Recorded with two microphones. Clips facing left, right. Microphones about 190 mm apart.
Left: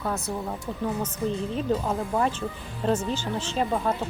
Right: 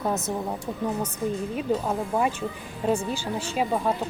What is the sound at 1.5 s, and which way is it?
A woman's voice, 10° right (ahead or behind).